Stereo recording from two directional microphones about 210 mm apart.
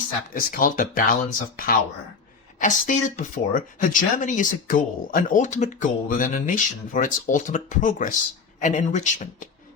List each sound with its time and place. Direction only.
0.3 s speech: 40° left (ahead or behind)